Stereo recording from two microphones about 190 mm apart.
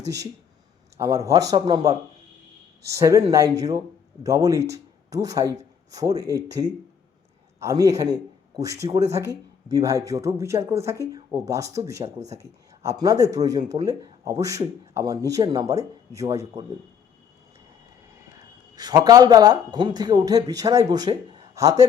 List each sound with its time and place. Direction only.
0.9 s speech: 15° right (ahead or behind)
2.9 s a man's voice: 15° right (ahead or behind)
12.0 s speech: 35° right (ahead or behind)
12.4 s speech: 15° right (ahead or behind)
18.8 s speech: 20° right (ahead or behind)